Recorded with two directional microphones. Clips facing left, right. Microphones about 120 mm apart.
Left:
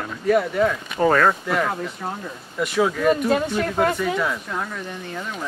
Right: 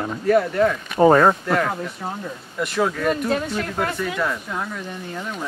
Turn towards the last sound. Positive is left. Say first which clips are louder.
# right 1 dB
turn(degrees=-5)  # may be behind; listen again after turning